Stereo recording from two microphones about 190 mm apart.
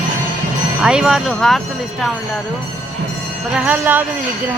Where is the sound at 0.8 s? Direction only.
5° right (ahead or behind).